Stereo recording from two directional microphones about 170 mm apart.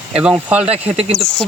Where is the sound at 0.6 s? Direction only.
35° right (ahead or behind).